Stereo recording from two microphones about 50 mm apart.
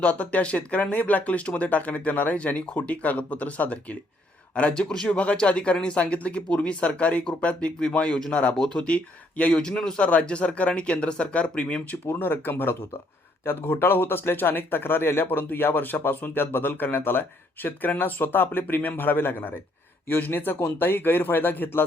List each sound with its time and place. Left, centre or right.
0.0 s a man's voice: left
12.0 s a man's voice: left